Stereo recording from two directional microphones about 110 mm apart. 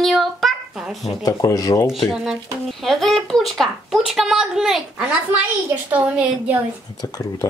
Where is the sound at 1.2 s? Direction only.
35° left (ahead or behind).